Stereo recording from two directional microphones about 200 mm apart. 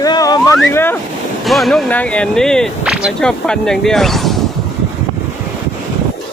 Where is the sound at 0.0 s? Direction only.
20° left (ahead or behind).